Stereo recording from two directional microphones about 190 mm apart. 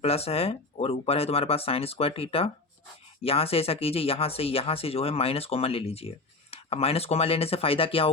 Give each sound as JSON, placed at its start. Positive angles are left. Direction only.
{"t": 0.0, "sound": "speech", "side_deg": 30}